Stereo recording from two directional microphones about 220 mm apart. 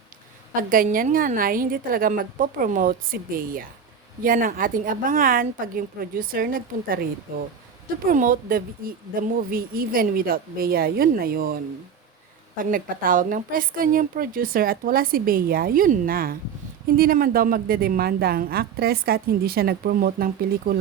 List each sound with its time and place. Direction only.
0.7 s a woman's voice: 40° right (ahead or behind)
12.7 s a woman's voice: 40° right (ahead or behind)